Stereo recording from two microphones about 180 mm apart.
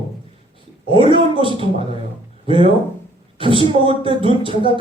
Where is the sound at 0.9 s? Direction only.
30° right (ahead or behind).